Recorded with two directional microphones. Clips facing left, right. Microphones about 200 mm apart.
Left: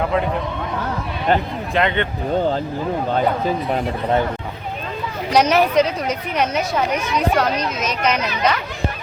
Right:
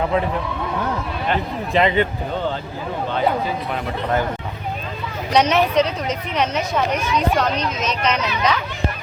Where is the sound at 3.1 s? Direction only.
40° left (ahead or behind).